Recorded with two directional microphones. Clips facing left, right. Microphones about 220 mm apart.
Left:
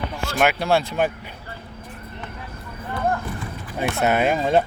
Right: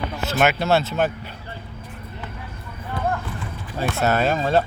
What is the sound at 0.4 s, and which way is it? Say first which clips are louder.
Speech: even; 10° left (ahead or behind).